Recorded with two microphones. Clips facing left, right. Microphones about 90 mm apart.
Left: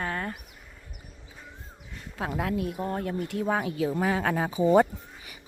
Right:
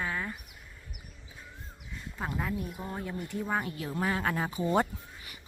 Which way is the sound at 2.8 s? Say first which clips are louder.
Left 7 dB; 60° left (ahead or behind).